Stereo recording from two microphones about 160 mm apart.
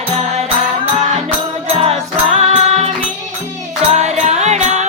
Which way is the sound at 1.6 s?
40° right (ahead or behind).